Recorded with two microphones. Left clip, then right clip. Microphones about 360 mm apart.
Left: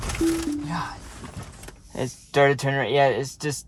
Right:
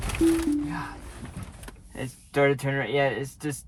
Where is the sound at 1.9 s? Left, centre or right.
Left.